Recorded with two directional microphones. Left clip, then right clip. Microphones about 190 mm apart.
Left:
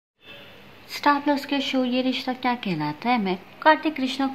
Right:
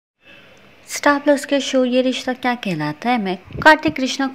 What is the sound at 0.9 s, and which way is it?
A woman's voice, 30° right (ahead or behind).